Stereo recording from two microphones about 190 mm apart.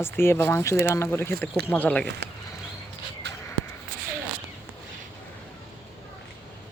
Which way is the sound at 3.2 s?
60° right (ahead or behind).